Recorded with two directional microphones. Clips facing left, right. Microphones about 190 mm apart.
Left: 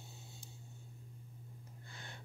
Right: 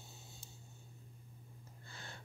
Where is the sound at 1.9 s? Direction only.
15° left (ahead or behind).